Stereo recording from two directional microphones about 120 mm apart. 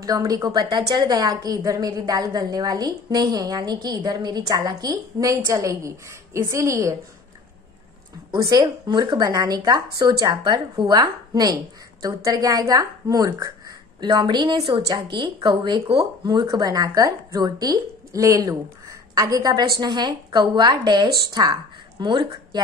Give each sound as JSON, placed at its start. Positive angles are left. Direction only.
{"t": 0.0, "sound": "a woman's voice", "side_deg": -30}
{"t": 8.3, "sound": "a woman's voice", "side_deg": -30}